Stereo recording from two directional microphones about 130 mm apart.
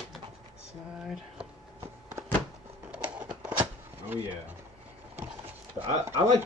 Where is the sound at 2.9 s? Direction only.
10° right (ahead or behind).